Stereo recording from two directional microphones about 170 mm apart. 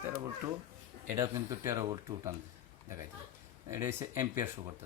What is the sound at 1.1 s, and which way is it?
Speech, 20° right (ahead or behind).